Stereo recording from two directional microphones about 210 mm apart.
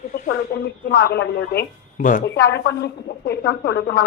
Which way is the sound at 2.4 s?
55° left (ahead or behind).